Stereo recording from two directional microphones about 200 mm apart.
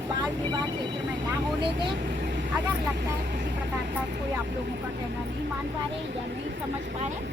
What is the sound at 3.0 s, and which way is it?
Speech, 55° right (ahead or behind).